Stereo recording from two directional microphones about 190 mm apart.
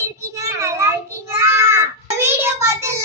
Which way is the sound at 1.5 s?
15° right (ahead or behind).